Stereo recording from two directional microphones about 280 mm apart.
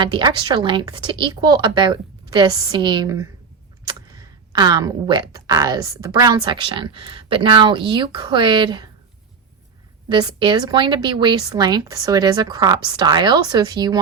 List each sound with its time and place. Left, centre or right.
0.0 s a woman's voice: centre
4.5 s a woman's voice: centre
10.1 s a woman's voice: centre